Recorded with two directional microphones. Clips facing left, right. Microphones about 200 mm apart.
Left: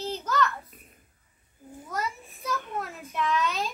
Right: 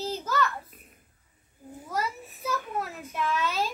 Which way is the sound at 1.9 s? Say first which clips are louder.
Right 2 dB; 5° right (ahead or behind).